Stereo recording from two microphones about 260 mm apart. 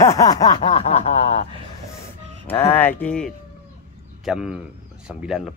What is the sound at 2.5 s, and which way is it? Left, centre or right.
Speech, centre.